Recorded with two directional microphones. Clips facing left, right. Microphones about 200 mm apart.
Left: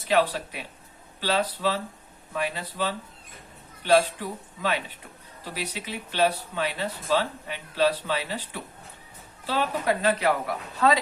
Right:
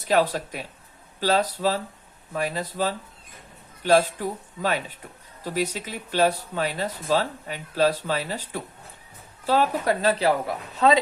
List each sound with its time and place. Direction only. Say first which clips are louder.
0.1 s speech: right 2 dB; 45° right (ahead or behind); by 11.0 s 20° right (ahead or behind)